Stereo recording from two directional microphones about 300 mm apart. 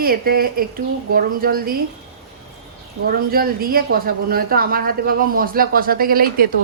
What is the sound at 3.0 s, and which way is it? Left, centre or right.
Speech, right.